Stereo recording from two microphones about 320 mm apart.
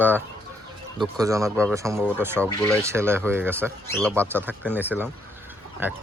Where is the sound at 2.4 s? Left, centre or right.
Centre.